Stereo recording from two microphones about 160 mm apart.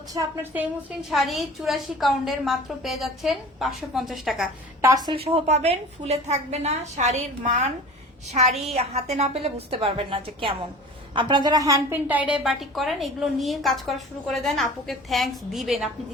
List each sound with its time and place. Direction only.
0.1 s a woman's voice: 25° right (ahead or behind)
1.1 s a woman's voice: centre (ahead or behind)
4.8 s a woman's voice: 20° right (ahead or behind)
5.1 s a woman's voice: 40° right (ahead or behind); by 11.9 s 20° right (ahead or behind)
12.0 s a woman's voice: 10° right (ahead or behind)